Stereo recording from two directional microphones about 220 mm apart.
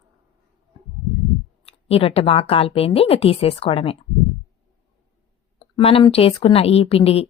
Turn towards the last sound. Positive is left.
turn(degrees=25)  # may be behind; listen again after turning